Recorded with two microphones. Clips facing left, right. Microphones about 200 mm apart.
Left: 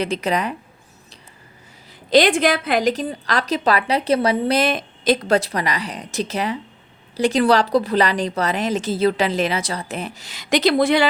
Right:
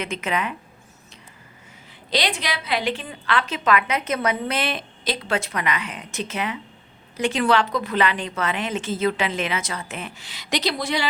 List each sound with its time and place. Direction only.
0.0 s a woman's voice: 35° left (ahead or behind)
1.9 s a woman's voice: 50° left (ahead or behind)